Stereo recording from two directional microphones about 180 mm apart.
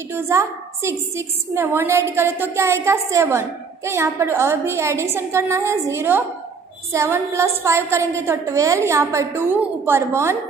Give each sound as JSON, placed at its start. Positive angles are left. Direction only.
{"t": 0.1, "sound": "a woman's voice", "side_deg": -15}